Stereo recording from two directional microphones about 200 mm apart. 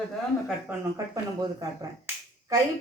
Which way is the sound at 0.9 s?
15° right (ahead or behind).